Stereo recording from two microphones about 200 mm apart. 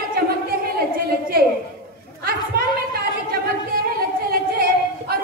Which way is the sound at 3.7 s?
45° right (ahead or behind).